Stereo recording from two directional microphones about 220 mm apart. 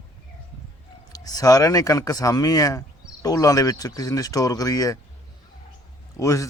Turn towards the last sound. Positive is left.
turn(degrees=15)  # may be behind; listen again after turning